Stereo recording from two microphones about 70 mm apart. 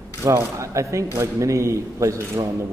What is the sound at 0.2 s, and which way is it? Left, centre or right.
A man's voice, right.